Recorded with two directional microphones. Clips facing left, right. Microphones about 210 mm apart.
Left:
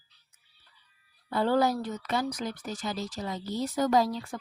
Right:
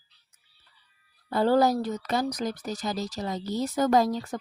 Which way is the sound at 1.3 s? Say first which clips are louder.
Right 3 dB; 40° right (ahead or behind).